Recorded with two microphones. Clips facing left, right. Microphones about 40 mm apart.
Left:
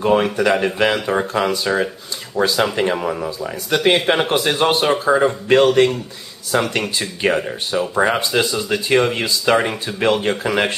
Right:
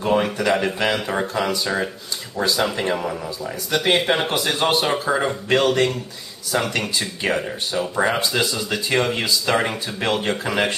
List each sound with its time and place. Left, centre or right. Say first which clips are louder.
0.1 s speech: left 2 dB; centre
1.3 s speech: left 4 dB; centre
6.5 s speech: left 4 dB; left
7.3 s speech: left 3 dB; centre